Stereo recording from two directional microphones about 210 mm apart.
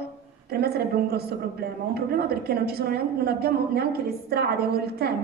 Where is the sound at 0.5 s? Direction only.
50° right (ahead or behind).